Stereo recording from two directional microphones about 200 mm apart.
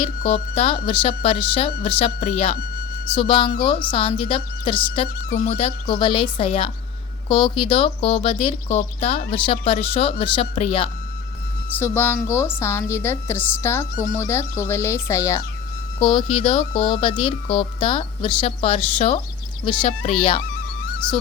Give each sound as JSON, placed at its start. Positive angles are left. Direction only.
{"t": 0.2, "sound": "speech", "side_deg": 35}
{"t": 11.8, "sound": "a woman's voice", "side_deg": 10}
{"t": 16.0, "sound": "speech", "side_deg": 25}